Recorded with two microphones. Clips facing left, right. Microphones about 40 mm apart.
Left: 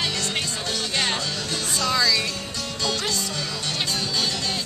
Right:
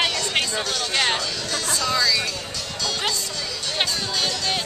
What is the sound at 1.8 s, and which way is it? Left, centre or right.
Music, centre.